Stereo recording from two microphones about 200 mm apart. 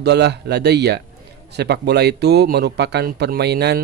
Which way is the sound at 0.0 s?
55° right (ahead or behind).